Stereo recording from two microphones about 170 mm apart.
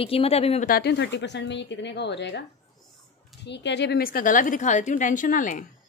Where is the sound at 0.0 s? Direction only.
35° left (ahead or behind).